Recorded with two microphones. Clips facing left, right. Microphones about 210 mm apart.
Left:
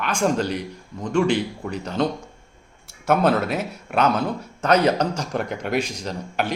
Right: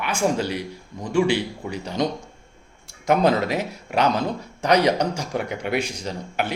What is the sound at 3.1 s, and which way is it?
Speech, 15° right (ahead or behind).